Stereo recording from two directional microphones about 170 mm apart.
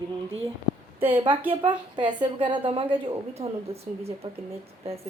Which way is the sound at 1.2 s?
30° right (ahead or behind).